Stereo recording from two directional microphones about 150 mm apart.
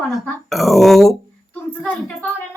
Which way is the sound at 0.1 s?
Centre (ahead or behind).